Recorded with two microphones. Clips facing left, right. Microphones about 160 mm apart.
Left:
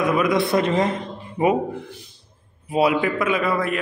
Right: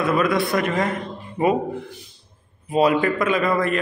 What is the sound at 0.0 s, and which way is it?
A man's voice, 15° left (ahead or behind).